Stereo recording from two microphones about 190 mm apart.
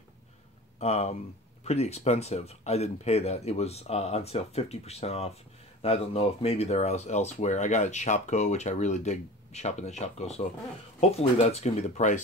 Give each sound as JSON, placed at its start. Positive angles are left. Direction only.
{"t": 0.7, "sound": "speech", "side_deg": 35}